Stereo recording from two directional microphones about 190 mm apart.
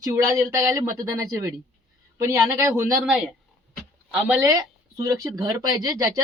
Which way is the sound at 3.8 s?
Centre (ahead or behind).